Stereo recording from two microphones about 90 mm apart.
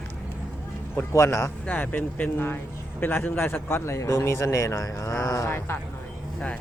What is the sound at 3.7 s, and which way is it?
Speech, 35° left (ahead or behind).